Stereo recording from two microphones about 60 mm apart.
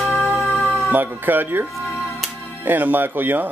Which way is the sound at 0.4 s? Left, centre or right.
Left.